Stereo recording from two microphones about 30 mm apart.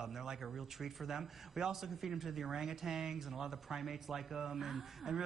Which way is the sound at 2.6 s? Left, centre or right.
Centre.